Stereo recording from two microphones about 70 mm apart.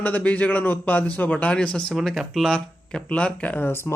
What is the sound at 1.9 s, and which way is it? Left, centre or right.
Speech, centre.